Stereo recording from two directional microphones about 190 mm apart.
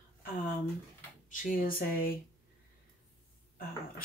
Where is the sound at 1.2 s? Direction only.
45° left (ahead or behind).